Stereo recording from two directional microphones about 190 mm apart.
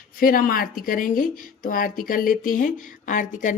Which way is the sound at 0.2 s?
50° left (ahead or behind).